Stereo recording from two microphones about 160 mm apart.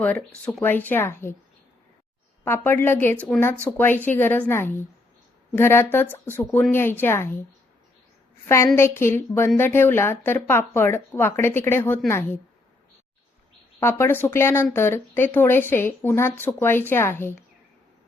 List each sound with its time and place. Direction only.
0.0 s speech: 5° left (ahead or behind)
2.4 s speech: 15° left (ahead or behind)
8.4 s speech: 15° left (ahead or behind)
13.7 s speech: 15° left (ahead or behind)